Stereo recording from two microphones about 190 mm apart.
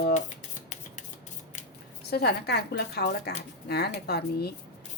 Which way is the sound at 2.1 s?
60° left (ahead or behind).